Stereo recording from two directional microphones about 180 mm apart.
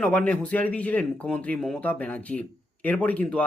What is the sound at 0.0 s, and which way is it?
Speech, 10° left (ahead or behind).